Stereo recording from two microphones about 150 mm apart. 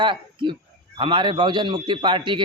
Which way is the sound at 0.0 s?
30° right (ahead or behind).